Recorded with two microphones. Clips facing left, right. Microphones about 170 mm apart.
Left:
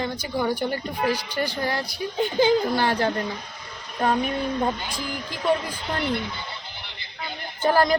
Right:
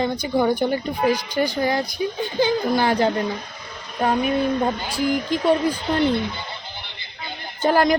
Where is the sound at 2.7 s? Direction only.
15° right (ahead or behind).